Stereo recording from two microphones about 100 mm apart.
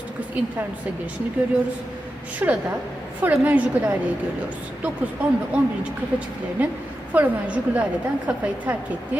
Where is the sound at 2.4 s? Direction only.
20° right (ahead or behind).